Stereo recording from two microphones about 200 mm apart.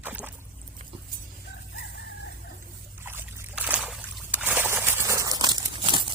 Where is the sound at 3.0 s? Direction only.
10° right (ahead or behind).